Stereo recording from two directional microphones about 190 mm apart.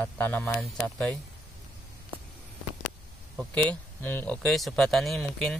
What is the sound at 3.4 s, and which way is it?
Speech, 5° left (ahead or behind).